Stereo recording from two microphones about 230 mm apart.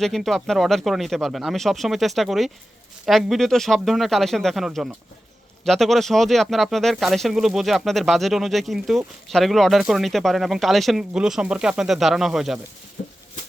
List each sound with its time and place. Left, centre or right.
0.0 s speech: centre
13.0 s maraca: left